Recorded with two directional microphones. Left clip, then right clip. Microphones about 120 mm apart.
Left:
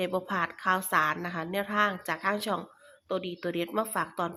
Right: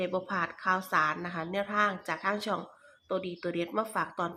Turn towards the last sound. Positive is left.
turn(degrees=25)  # may be behind; listen again after turning